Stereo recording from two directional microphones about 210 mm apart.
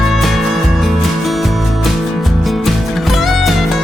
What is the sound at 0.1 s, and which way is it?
Music, centre (ahead or behind).